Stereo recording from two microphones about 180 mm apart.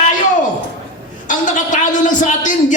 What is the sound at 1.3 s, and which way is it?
Speech, 45° left (ahead or behind).